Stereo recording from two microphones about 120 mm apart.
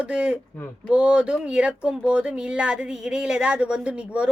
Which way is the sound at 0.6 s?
20° left (ahead or behind).